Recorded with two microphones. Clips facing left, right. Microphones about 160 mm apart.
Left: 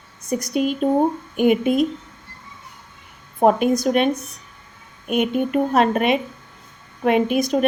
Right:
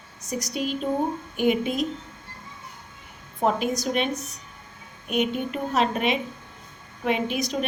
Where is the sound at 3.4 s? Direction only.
50° left (ahead or behind).